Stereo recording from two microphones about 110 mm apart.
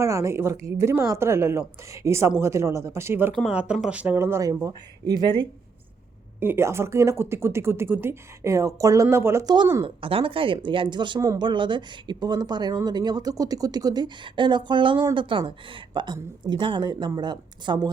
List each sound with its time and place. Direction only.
0.0 s speech: 25° right (ahead or behind)
6.4 s speech: 20° right (ahead or behind)
9.8 s speech: 55° right (ahead or behind); by 17.9 s 40° right (ahead or behind)